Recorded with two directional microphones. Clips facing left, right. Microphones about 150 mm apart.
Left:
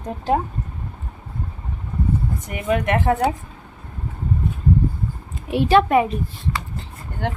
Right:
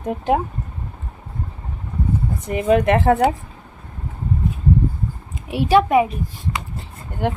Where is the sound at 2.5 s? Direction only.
30° right (ahead or behind).